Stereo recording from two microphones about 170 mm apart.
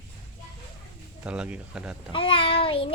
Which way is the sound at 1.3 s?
5° right (ahead or behind).